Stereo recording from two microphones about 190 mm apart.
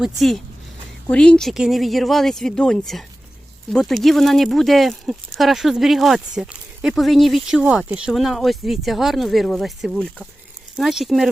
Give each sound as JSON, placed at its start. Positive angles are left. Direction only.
{"t": 0.0, "sound": "speech", "side_deg": 0}